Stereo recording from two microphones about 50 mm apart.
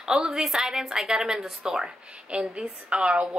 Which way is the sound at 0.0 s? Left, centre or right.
Centre.